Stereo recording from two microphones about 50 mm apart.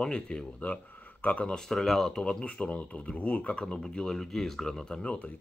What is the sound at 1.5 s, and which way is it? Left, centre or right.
Speech, centre.